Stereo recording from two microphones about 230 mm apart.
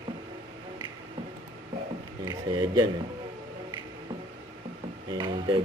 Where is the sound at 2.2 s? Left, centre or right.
Centre.